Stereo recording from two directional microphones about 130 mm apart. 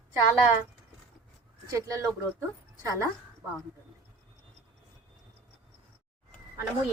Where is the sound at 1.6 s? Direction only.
25° right (ahead or behind).